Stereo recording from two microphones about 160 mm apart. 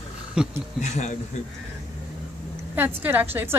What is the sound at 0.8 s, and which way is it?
Speech, 45° left (ahead or behind).